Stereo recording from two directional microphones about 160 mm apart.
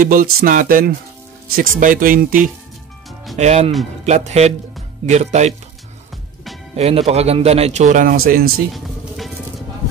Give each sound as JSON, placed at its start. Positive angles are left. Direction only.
{"t": 0.0, "sound": "speech", "side_deg": -60}
{"t": 3.3, "sound": "speech", "side_deg": -45}
{"t": 6.8, "sound": "speech", "side_deg": -40}
{"t": 8.7, "sound": "music", "side_deg": 0}